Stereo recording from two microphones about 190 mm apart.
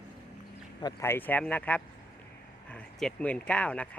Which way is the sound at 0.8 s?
15° left (ahead or behind).